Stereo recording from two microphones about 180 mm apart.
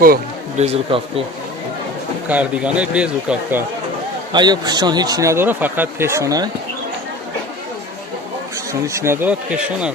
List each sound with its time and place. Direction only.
0.5 s speech: 35° right (ahead or behind)
2.2 s speech: 5° right (ahead or behind)
4.3 s speech: 25° right (ahead or behind)
8.9 s speech: 15° right (ahead or behind)